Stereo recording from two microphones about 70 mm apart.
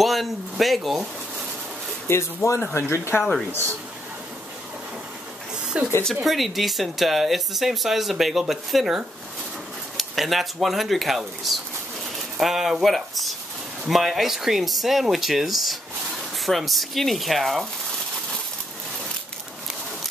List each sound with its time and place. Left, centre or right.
0.0 s speech: centre
2.0 s speech: left
5.7 s speech: centre
6.2 s speech: centre